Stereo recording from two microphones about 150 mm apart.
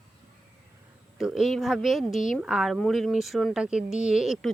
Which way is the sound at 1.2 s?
Centre (ahead or behind).